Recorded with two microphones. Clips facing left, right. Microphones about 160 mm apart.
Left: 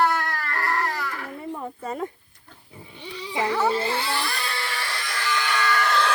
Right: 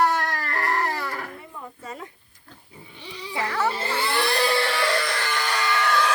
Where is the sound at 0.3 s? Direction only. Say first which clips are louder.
Right 1 dB; 20° right (ahead or behind).